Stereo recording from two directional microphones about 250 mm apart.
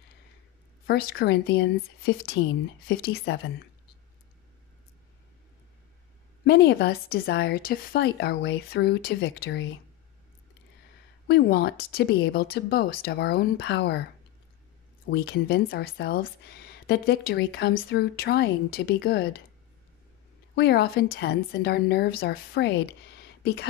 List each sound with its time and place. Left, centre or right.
0.8 s speech: left
6.4 s speech: left
11.2 s speech: left
15.0 s speech: left
20.5 s speech: left